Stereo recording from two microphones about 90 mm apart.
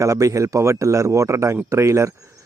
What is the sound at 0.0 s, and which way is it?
Speech, 40° right (ahead or behind).